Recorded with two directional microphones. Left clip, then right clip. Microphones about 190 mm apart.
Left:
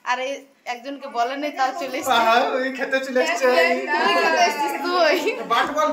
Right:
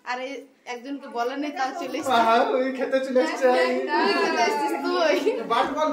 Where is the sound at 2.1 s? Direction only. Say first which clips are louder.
Left 2 dB; 5° right (ahead or behind).